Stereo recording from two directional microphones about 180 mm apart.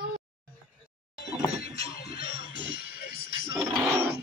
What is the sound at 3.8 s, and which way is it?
Sewing machine, 15° right (ahead or behind).